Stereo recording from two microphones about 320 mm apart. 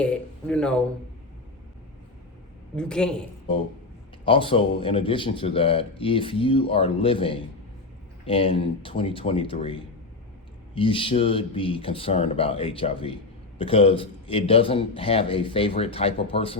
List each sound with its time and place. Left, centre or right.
0.0 s speech: centre
2.7 s a woman's voice: centre
4.3 s speech: centre
10.8 s speech: centre